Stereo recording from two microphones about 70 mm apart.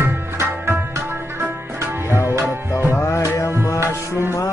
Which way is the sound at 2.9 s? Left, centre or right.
Left.